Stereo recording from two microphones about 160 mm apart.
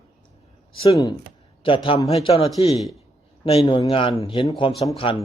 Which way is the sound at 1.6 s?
35° left (ahead or behind).